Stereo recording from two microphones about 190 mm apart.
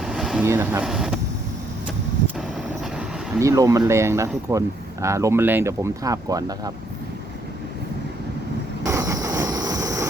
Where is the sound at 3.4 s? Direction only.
15° right (ahead or behind).